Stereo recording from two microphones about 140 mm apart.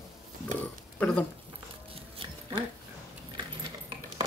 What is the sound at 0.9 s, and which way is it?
Dog, 10° left (ahead or behind).